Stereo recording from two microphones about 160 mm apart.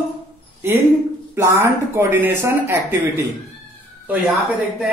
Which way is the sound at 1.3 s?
15° right (ahead or behind).